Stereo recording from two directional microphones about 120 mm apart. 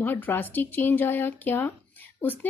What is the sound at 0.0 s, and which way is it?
Speech, 15° left (ahead or behind).